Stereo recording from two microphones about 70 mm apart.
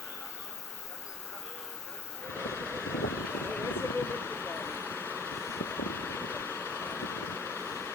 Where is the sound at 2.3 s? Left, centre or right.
Left.